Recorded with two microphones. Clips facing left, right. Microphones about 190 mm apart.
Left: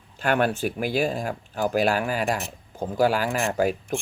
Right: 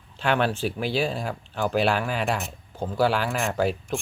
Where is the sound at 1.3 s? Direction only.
10° left (ahead or behind).